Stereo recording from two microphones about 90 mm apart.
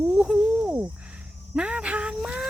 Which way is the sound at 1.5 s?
15° right (ahead or behind).